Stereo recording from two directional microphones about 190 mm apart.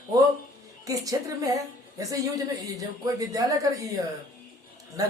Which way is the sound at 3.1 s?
20° right (ahead or behind).